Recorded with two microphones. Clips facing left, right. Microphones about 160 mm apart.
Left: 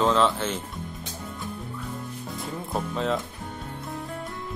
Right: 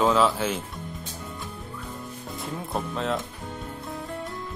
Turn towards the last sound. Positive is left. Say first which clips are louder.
# left 1 dB
turn(degrees=0)  # may be behind; listen again after turning